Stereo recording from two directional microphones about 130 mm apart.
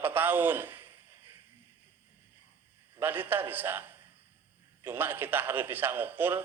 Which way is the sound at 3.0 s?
15° right (ahead or behind).